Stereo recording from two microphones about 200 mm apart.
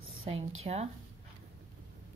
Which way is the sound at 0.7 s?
35° right (ahead or behind).